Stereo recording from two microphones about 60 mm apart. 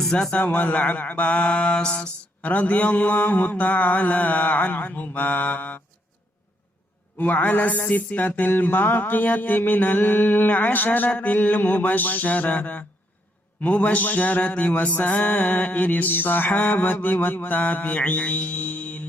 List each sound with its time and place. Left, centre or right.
0.0 s a man's voice: centre
0.3 s speech: left
7.2 s speech: left